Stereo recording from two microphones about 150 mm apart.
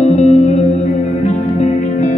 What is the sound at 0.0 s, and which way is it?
Music, 45° left (ahead or behind).